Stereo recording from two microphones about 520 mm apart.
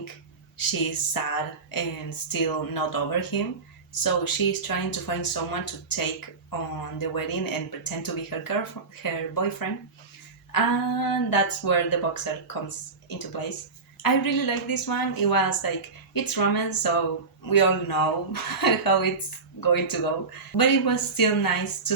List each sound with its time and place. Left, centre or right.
0.5 s speech: left